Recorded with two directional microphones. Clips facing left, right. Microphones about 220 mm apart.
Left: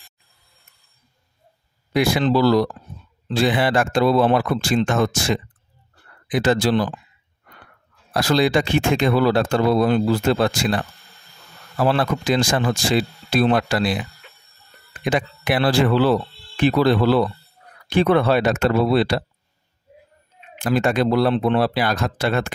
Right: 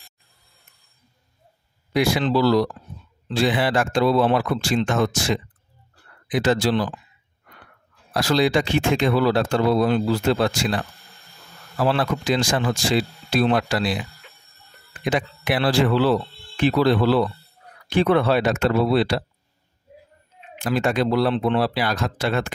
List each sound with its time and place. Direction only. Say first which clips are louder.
2.0 s speech: left 2 dB; 50° left (ahead or behind)
8.1 s speech: left 1 dB; 50° left (ahead or behind)
11.8 s speech: left 2 dB; 50° left (ahead or behind)
15.0 s speech: left 2 dB; 50° left (ahead or behind)
20.6 s speech: left 2 dB; 50° left (ahead or behind)